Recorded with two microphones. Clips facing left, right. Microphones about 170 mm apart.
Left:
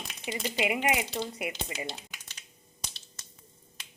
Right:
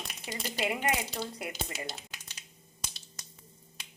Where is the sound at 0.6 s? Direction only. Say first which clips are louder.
Left 2 dB; 10° left (ahead or behind).